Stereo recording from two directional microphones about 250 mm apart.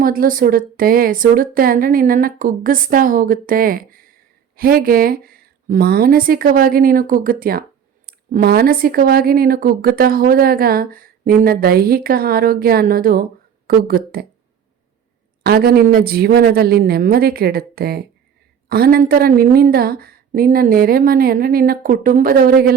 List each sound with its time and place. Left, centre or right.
0.0 s a woman's voice: right
15.4 s a woman's voice: right